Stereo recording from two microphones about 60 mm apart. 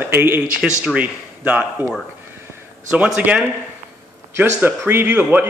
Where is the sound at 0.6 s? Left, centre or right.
Centre.